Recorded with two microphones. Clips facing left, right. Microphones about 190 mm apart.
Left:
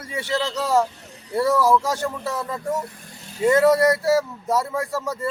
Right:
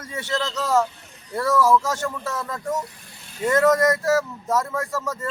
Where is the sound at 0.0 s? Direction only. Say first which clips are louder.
Left 2 dB; 10° left (ahead or behind).